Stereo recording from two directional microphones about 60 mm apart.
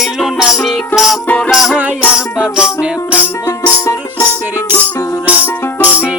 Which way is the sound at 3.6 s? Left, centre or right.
Left.